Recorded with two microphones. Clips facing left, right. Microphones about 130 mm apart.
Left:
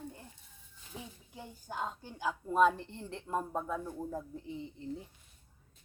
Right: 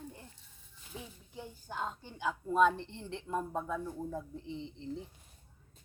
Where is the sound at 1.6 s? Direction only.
10° left (ahead or behind).